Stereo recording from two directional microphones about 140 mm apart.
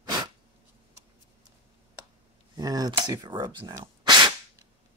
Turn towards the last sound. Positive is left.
turn(degrees=-35)  # may be behind; listen again after turning